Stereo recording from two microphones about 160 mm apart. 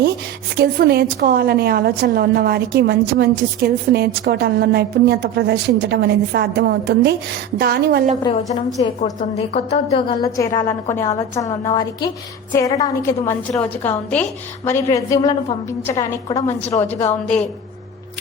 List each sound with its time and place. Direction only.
0.5 s a woman's voice: 75° right (ahead or behind)
8.2 s a woman's voice: 25° left (ahead or behind)
8.8 s a woman's voice: 35° left (ahead or behind)
10.2 s a woman's voice: 20° left (ahead or behind)
17.1 s a woman's voice: 5° left (ahead or behind)